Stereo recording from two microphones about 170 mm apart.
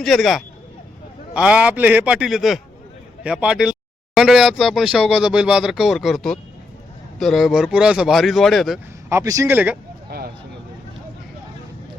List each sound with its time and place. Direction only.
0.0 s a man's voice: centre (ahead or behind)
9.0 s a man's voice: 20° right (ahead or behind)